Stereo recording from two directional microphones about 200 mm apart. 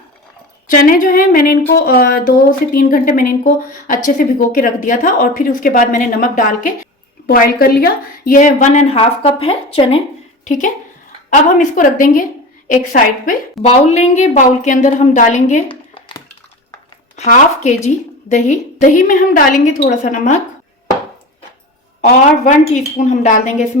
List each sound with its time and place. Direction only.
0.7 s a woman's voice: 45° left (ahead or behind)
15.7 s a sound: 25° left (ahead or behind)
17.2 s a woman's voice: 35° left (ahead or behind)
22.0 s a woman's voice: 40° left (ahead or behind)